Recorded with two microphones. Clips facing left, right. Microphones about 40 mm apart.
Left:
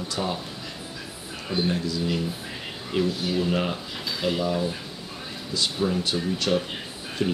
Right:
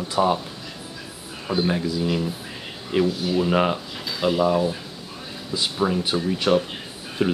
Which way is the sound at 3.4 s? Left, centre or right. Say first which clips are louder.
Right 7 dB; right.